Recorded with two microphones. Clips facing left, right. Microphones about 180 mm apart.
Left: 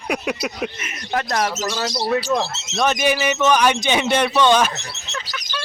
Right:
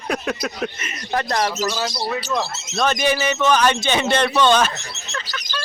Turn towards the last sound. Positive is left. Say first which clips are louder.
# left 1 dB
turn(degrees=10)  # may be behind; listen again after turning